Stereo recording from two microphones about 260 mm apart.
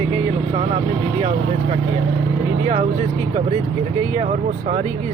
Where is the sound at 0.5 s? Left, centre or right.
Right.